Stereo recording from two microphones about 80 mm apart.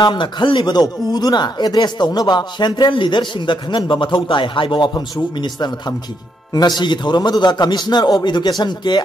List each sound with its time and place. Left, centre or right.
0.0 s speech: left
2.8 s a man's voice: left
5.4 s speech: left